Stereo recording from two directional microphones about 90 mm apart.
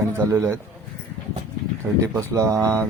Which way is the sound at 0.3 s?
30° right (ahead or behind).